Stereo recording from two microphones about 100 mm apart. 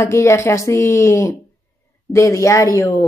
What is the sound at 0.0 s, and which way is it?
Speech, 30° left (ahead or behind).